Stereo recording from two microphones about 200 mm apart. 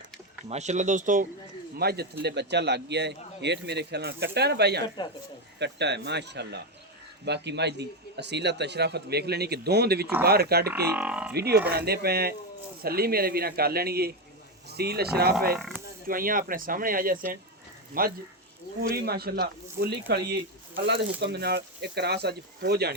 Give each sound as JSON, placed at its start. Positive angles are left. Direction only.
{"t": 0.4, "sound": "speech", "side_deg": -35}
{"t": 1.8, "sound": "a man's voice", "side_deg": -50}
{"t": 5.0, "sound": "speech", "side_deg": 20}
{"t": 5.5, "sound": "a man's voice", "side_deg": -60}
{"t": 10.7, "sound": "speech", "side_deg": -15}
{"t": 11.3, "sound": "a man's voice", "side_deg": -55}